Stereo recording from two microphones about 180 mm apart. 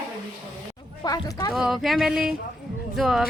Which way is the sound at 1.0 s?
20° left (ahead or behind).